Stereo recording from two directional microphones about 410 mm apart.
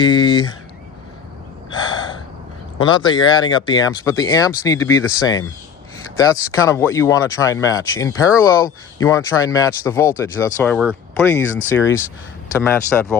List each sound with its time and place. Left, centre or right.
0.0 s speech: centre
1.7 s gasp: centre
2.7 s speech: centre
11.5 s speech: left
12.6 s speech: centre